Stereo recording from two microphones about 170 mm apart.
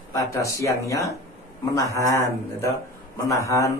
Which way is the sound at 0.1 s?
20° left (ahead or behind).